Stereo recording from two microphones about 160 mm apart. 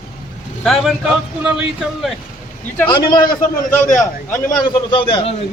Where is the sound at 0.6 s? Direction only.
Centre (ahead or behind).